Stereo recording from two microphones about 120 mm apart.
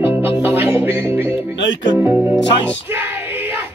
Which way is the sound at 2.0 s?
20° right (ahead or behind).